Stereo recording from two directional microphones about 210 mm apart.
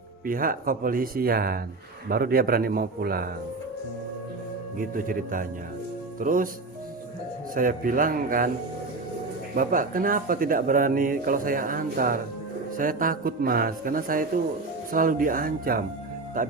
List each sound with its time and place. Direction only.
0.3 s speech: 40° right (ahead or behind)
4.8 s speech: 40° right (ahead or behind)
7.5 s speech: 40° right (ahead or behind)
9.6 s speech: 40° right (ahead or behind)